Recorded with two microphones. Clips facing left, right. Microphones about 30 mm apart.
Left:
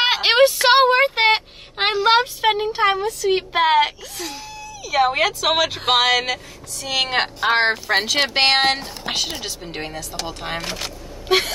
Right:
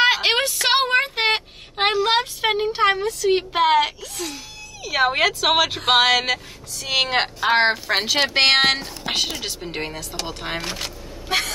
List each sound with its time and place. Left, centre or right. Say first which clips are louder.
0.0 s a sound: left 3 dB; centre
2.4 s a woman's voice: left 1 dB; centre
4.8 s speech: left 1 dB; centre
6.8 s a woman's voice: right 1 dB; centre
7.4 s a woman's voice: even; centre
11.2 s speech: left 4 dB; centre